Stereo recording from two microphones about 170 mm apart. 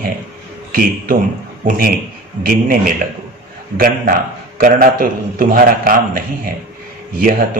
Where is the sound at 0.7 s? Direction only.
60° right (ahead or behind).